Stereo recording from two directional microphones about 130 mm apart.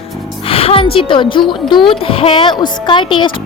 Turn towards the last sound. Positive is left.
turn(degrees=40)  # may be behind; listen again after turning